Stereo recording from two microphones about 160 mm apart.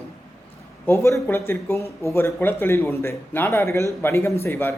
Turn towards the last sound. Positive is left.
turn(degrees=15)  # may be behind; listen again after turning